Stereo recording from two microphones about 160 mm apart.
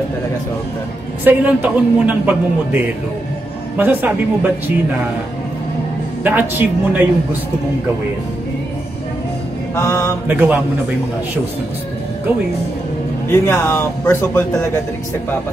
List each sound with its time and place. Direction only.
1.2 s a man's voice: 10° right (ahead or behind)
6.2 s a man's voice: 10° right (ahead or behind)
9.8 s speech: 20° left (ahead or behind)
10.2 s a man's voice: 10° right (ahead or behind)
13.3 s speech: 15° left (ahead or behind)